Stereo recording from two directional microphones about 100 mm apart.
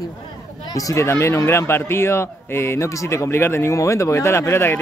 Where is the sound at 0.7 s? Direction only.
30° left (ahead or behind).